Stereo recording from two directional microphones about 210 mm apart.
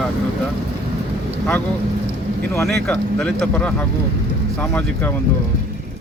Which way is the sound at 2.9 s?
5° left (ahead or behind).